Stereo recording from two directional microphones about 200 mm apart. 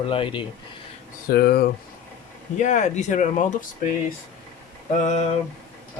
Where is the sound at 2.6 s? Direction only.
35° left (ahead or behind).